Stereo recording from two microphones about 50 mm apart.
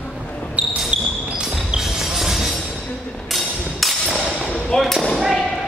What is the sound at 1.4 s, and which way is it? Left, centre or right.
Music, centre.